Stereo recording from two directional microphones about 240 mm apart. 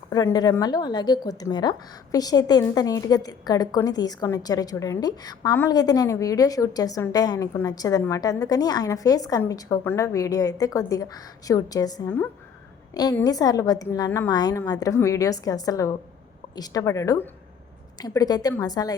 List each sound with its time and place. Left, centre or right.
0.1 s a woman's voice: centre